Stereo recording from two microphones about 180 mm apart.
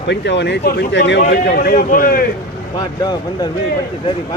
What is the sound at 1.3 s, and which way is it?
Speech, 60° left (ahead or behind).